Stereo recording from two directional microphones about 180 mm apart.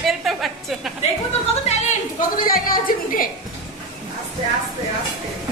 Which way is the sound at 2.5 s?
50° left (ahead or behind).